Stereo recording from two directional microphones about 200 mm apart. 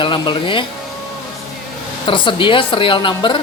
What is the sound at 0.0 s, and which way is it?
Speech, 25° left (ahead or behind).